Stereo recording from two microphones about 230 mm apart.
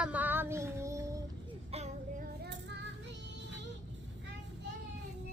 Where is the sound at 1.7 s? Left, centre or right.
Right.